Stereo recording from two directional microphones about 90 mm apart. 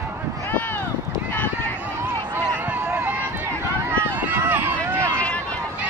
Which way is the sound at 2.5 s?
20° right (ahead or behind).